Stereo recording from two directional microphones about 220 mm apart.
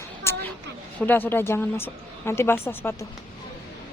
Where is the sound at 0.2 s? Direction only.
10° left (ahead or behind).